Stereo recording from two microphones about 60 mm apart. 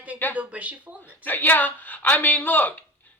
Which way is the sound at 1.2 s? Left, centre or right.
Left.